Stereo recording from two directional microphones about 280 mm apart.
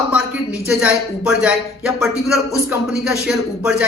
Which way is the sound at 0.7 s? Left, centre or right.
Centre.